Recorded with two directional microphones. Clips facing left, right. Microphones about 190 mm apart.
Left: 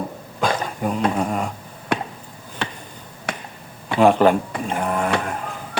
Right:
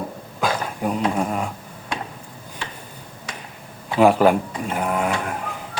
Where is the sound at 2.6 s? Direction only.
70° left (ahead or behind).